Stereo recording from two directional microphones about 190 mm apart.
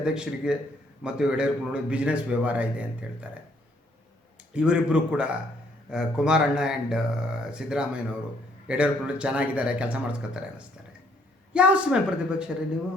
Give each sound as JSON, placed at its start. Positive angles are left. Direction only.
{"t": 0.0, "sound": "a man's voice", "side_deg": -5}
{"t": 4.5, "sound": "a man's voice", "side_deg": -5}
{"t": 11.5, "sound": "speech", "side_deg": -5}